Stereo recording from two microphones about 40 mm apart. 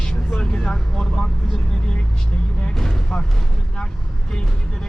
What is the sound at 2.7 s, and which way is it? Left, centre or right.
Speech, centre.